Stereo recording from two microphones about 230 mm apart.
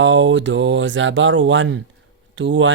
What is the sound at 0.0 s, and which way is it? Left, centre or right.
Speech, right.